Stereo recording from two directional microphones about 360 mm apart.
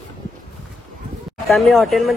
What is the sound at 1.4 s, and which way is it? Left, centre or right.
Speech, centre.